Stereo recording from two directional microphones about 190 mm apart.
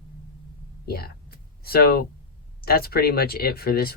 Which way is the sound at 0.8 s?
55° left (ahead or behind).